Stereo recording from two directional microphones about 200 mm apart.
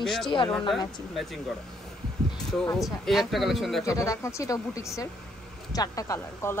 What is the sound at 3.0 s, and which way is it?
Speech, centre (ahead or behind).